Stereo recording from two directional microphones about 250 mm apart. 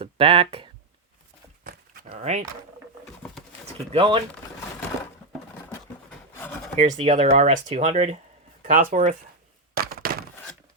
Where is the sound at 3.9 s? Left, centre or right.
Centre.